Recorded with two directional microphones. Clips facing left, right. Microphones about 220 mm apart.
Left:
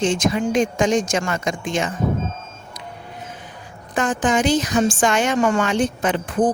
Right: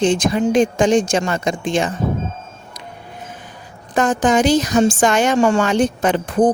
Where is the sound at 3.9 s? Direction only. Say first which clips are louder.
Right 4 dB; 40° right (ahead or behind).